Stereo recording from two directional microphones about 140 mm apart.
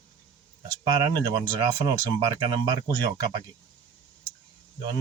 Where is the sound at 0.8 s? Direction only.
25° right (ahead or behind).